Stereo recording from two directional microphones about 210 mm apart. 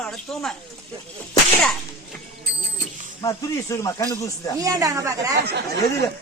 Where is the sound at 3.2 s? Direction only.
15° left (ahead or behind).